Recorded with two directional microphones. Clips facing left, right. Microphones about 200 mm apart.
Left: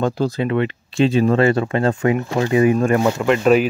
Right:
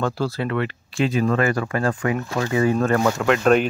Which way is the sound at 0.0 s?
20° left (ahead or behind).